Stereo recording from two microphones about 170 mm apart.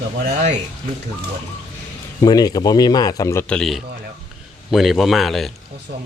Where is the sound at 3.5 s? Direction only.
Centre (ahead or behind).